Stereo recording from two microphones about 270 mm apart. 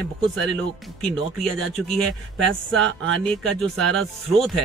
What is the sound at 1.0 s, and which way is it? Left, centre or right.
Speech, centre.